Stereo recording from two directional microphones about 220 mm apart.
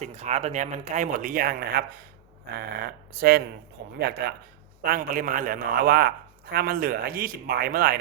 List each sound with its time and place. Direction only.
0.0 s a man's voice: 30° right (ahead or behind)